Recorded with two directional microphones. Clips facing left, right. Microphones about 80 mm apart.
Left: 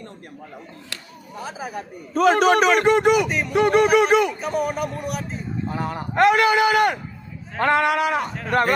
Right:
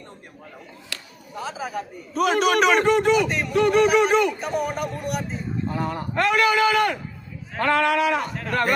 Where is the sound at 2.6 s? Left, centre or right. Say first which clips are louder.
Left 1 dB; centre.